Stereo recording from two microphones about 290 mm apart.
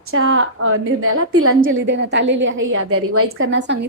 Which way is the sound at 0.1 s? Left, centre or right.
Right.